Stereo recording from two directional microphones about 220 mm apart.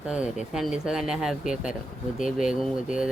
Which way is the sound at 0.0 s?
5° right (ahead or behind).